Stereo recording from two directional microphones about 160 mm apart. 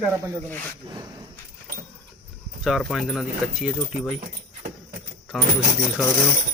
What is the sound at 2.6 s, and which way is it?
Speech, centre (ahead or behind).